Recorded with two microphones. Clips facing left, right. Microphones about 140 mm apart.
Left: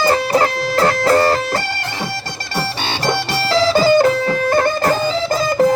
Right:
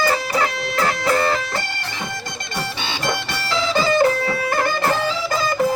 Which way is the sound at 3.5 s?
35° left (ahead or behind).